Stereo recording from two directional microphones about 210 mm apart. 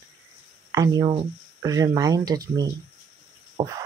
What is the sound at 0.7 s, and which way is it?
Speech, 20° right (ahead or behind).